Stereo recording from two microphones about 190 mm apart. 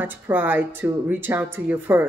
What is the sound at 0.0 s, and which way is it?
A woman's voice, 10° right (ahead or behind).